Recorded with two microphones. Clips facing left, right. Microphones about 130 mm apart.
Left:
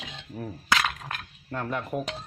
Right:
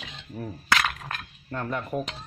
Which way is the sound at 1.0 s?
10° left (ahead or behind).